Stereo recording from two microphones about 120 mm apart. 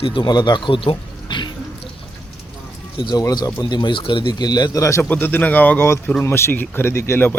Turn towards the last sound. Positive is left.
turn(degrees=20)  # may be behind; listen again after turning